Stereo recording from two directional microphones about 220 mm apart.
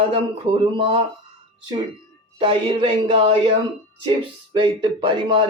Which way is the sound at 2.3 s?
25° right (ahead or behind).